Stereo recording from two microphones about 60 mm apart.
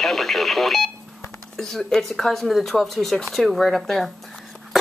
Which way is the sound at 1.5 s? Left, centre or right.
Centre.